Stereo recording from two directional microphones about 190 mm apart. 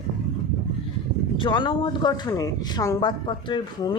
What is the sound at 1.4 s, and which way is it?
A woman's voice, 25° left (ahead or behind).